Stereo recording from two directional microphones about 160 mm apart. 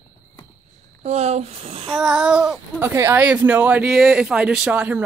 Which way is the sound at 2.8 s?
15° right (ahead or behind).